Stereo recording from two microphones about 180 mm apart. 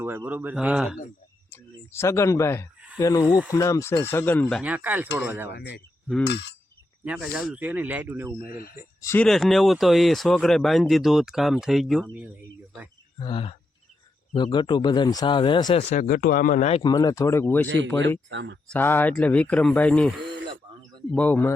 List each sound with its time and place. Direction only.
0.0 s speech: 10° right (ahead or behind)
1.5 s speech: 15° left (ahead or behind)
4.6 s speech: 10° right (ahead or behind)
5.5 s speech: 65° left (ahead or behind)
6.2 s a sound: 70° left (ahead or behind)
7.0 s speech: 5° right (ahead or behind)
8.4 s speech: 55° left (ahead or behind)
9.0 s speech: 15° left (ahead or behind)
9.2 s speech: centre (ahead or behind)
13.1 s speech: 30° left (ahead or behind)
15.9 s speech: 50° left (ahead or behind)
16.8 s speech: 20° left (ahead or behind)
18.3 s speech: 80° right
18.7 s speech: 10° left (ahead or behind)